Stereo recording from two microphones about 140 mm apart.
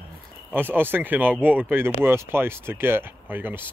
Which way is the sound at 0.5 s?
15° right (ahead or behind).